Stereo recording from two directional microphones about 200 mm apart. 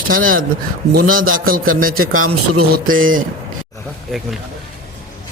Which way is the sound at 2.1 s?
90° right.